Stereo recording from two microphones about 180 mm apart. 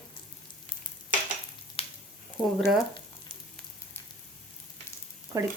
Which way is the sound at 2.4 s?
25° left (ahead or behind).